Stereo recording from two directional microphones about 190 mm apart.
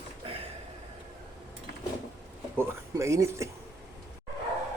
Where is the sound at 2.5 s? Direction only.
15° right (ahead or behind).